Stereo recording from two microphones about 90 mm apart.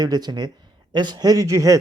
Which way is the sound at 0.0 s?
50° right (ahead or behind).